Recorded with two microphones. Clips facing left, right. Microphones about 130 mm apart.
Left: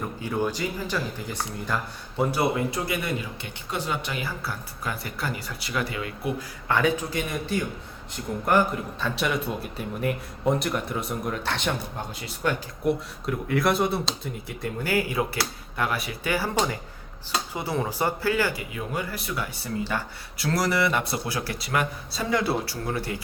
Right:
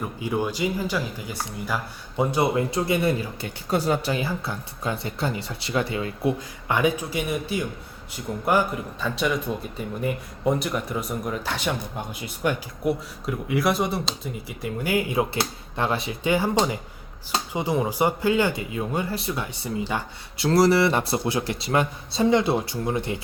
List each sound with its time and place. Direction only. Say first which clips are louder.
0.2 s speech: right 2 dB; 15° right (ahead or behind)
2.3 s speech: right 4 dB; 25° right (ahead or behind)
6.7 s a man's voice: right 1 dB; 15° right (ahead or behind)
12.2 s speech: right 2 dB; 15° right (ahead or behind)
12.8 s a man's voice: even; 5° right (ahead or behind)
14.8 s speech: right 2 dB; 20° right (ahead or behind)